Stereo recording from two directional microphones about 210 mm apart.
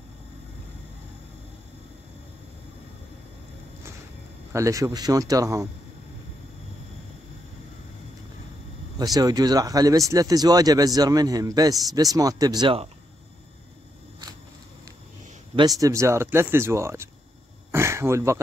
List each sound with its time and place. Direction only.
4.5 s speech: 15° right (ahead or behind)
8.9 s speech: 20° right (ahead or behind)
15.5 s speech: 15° right (ahead or behind)
17.6 s a sound: 10° right (ahead or behind)